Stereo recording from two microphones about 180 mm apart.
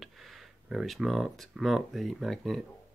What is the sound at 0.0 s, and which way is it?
Speech, centre (ahead or behind).